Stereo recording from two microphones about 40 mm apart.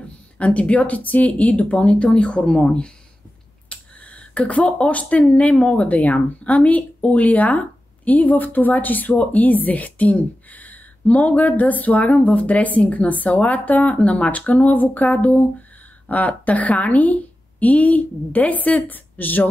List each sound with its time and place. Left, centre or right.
0.4 s speech: left
3.6 s speech: left